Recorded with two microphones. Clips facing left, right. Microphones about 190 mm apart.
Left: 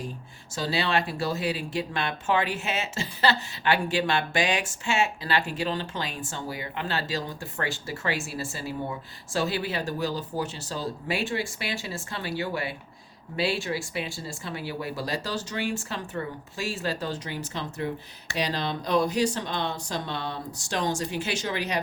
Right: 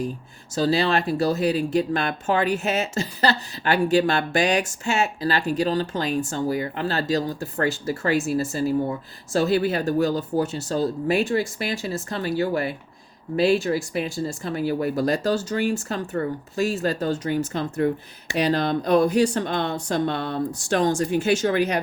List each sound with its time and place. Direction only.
0.5 s speech: 40° right (ahead or behind)